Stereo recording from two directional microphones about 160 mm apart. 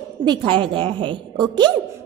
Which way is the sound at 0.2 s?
30° right (ahead or behind).